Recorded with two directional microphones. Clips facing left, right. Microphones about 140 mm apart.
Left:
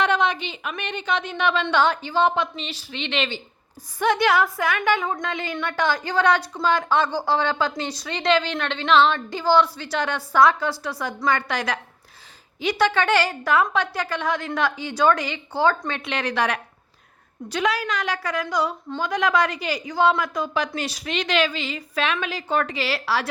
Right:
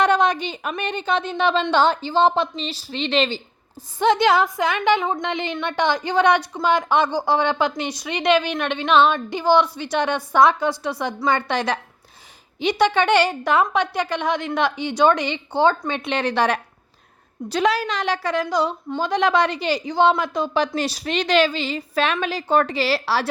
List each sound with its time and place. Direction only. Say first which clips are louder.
0.0 s a woman's voice: right 4 dB; 40° right (ahead or behind)
3.9 s a woman's voice: right 3 dB; 25° right (ahead or behind)